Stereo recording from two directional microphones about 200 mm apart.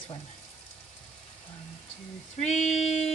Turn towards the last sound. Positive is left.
turn(degrees=35)  # may be behind; listen again after turning